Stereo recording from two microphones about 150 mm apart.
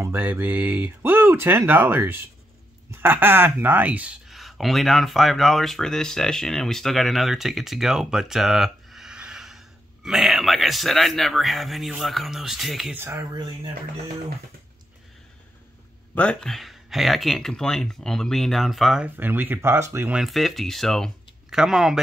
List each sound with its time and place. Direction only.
0.0 s speech: 15° right (ahead or behind)
12.9 s speech: 15° right (ahead or behind)
16.2 s speech: 5° left (ahead or behind); by 20.2 s 15° right (ahead or behind)
20.2 s speech: centre (ahead or behind)